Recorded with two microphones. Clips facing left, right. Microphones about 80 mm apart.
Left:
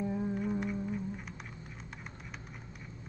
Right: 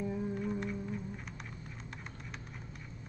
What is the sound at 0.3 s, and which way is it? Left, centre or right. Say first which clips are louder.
Music: left 2 dB; centre.